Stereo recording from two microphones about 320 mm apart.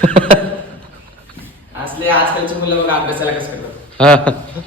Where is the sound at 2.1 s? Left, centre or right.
Centre.